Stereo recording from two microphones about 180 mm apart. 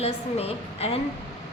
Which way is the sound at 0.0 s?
35° left (ahead or behind).